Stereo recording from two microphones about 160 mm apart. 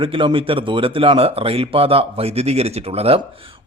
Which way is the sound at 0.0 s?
30° right (ahead or behind).